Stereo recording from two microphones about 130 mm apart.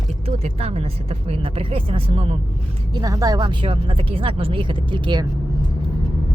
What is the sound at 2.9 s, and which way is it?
Speech, 30° right (ahead or behind).